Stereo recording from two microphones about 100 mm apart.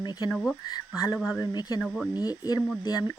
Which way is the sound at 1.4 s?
40° left (ahead or behind).